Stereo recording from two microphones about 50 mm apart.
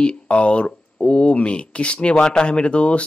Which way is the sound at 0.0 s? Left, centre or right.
Left.